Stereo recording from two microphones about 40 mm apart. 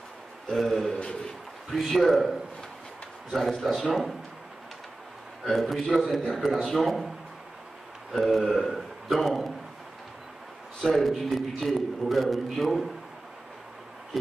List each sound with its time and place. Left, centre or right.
0.6 s a man's voice: centre
0.8 s a man's voice: left
1.7 s a man's voice: centre
5.4 s a man's voice: centre
8.1 s a man's voice: centre
10.8 s a man's voice: centre